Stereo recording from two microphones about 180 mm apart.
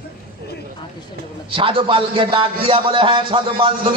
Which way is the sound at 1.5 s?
30° right (ahead or behind).